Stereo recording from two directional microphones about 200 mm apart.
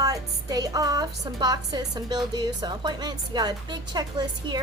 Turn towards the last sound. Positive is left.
turn(degrees=-20)  # may be behind; listen again after turning